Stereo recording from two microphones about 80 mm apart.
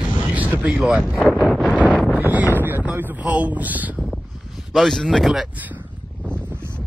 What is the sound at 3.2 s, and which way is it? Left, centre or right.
Speech, centre.